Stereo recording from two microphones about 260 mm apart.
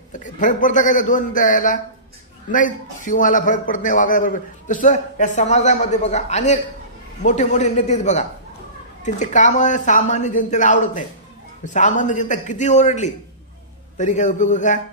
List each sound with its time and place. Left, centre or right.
0.2 s a man's voice: left